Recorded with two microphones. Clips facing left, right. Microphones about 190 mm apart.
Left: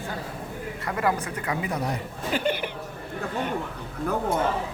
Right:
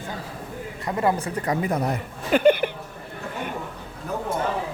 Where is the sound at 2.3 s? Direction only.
55° right (ahead or behind).